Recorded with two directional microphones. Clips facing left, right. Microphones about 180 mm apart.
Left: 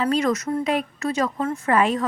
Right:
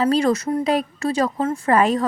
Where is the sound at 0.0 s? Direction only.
35° right (ahead or behind).